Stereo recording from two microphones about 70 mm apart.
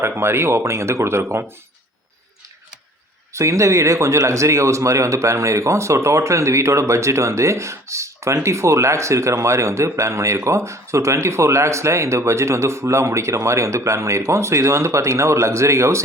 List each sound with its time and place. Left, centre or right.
0.2 s speech: right
3.3 s speech: right